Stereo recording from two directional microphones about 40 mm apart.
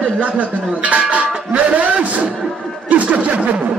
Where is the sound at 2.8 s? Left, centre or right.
Right.